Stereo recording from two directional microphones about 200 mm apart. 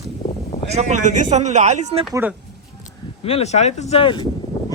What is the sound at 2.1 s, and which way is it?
Speech, 10° right (ahead or behind).